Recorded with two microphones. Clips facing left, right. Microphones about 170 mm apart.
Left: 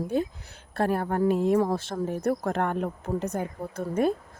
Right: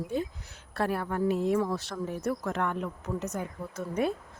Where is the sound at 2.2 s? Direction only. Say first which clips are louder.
Left 5 dB; 55° left (ahead or behind).